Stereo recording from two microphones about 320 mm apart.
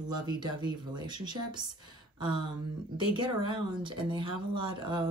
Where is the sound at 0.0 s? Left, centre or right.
Centre.